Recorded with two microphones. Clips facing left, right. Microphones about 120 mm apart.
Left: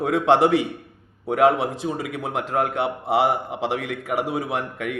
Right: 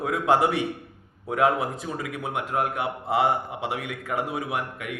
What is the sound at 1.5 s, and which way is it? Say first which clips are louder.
Speech: left 5 dB; 75° left (ahead or behind).